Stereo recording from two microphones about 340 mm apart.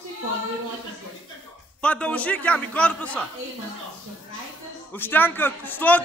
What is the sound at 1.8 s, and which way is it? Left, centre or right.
Speech, centre.